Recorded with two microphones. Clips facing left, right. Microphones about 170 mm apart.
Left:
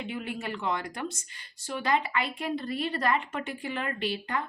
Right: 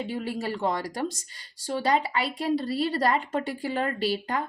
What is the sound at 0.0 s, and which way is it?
Speech, 35° right (ahead or behind).